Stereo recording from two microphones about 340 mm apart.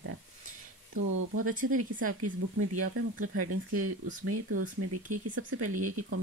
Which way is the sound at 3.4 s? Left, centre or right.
Right.